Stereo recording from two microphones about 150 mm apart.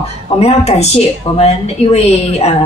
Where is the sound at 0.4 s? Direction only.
45° left (ahead or behind).